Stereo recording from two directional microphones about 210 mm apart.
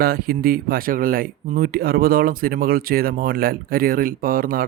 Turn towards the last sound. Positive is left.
turn(degrees=-40)  # may be behind; listen again after turning